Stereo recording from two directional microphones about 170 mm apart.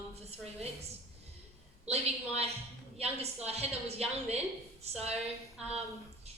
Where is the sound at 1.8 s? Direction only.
40° right (ahead or behind).